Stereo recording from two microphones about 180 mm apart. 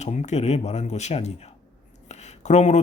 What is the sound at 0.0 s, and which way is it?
Speech, 40° left (ahead or behind).